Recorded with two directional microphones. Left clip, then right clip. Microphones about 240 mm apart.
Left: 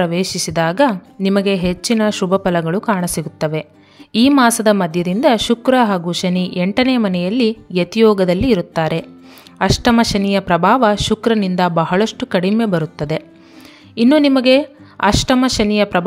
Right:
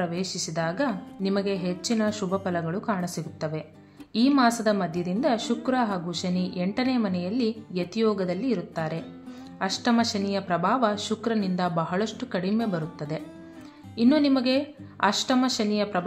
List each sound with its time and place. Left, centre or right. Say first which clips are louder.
0.0 s a woman's voice: left 12 dB; left